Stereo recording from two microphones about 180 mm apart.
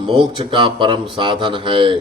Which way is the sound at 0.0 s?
25° right (ahead or behind).